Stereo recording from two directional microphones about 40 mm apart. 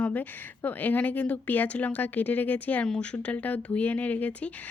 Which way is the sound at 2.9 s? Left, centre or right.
Left.